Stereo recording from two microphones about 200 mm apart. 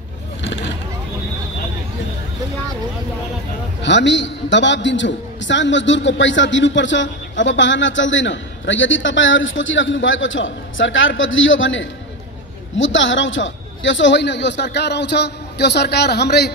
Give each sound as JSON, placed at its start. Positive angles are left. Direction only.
{"t": 3.8, "sound": "a man's voice", "side_deg": 65}